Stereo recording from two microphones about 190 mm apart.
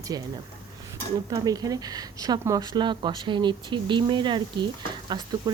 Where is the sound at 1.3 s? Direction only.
20° right (ahead or behind).